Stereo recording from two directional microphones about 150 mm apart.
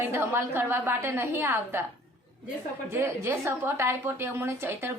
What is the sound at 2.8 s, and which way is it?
A woman's voice, 15° right (ahead or behind).